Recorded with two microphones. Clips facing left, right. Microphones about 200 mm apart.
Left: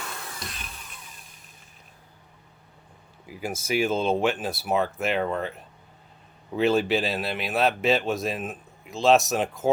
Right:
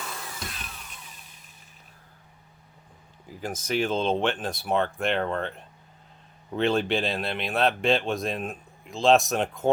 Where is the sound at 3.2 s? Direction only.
10° left (ahead or behind).